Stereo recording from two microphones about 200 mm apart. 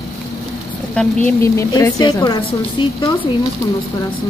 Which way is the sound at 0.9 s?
10° left (ahead or behind).